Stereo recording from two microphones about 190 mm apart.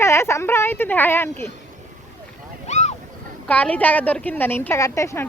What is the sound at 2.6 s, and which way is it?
Boat, 35° left (ahead or behind).